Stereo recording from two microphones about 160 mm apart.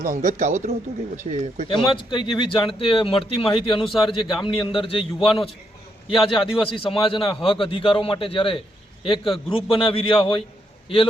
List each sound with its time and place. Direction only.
0.0 s speech: 50° right (ahead or behind)
1.6 s a man's voice: 30° left (ahead or behind)